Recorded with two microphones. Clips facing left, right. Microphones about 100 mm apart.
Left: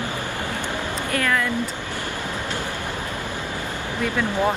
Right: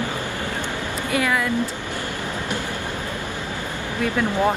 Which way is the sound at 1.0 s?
10° right (ahead or behind).